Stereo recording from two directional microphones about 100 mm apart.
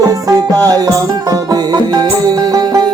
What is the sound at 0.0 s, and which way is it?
Music, 35° right (ahead or behind).